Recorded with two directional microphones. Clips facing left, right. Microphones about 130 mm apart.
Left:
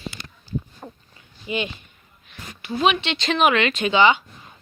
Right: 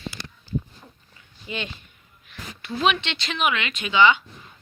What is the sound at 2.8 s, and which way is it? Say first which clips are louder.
Speech: left 2 dB; 10° left (ahead or behind).